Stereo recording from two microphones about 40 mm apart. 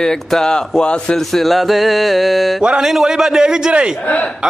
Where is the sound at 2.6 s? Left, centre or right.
Centre.